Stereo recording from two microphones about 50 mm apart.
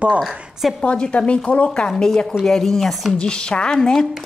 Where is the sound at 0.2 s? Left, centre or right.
Centre.